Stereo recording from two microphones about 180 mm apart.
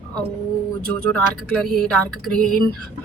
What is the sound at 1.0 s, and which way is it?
Speech, 5° left (ahead or behind).